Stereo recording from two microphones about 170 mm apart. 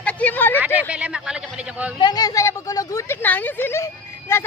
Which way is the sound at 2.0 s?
25° left (ahead or behind).